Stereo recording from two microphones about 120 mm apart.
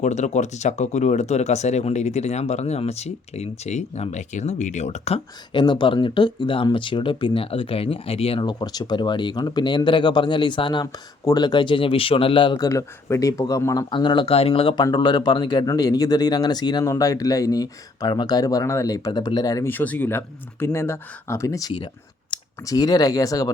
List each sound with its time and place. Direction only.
0.0 s speech: 75° left (ahead or behind)
5.5 s speech: 40° left (ahead or behind)
12.6 s speech: 30° left (ahead or behind)
13.9 s speech: 40° left (ahead or behind)
19.6 s speech: 15° left (ahead or behind)